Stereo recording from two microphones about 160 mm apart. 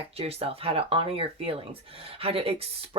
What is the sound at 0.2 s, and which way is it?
Speech, 40° right (ahead or behind).